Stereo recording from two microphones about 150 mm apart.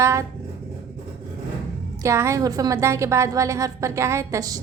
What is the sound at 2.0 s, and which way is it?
A woman's voice, 20° right (ahead or behind).